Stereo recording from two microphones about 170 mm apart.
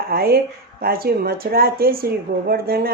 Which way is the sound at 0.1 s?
65° right (ahead or behind).